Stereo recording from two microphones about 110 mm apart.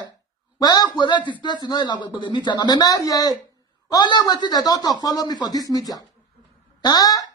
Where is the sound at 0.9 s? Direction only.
45° left (ahead or behind).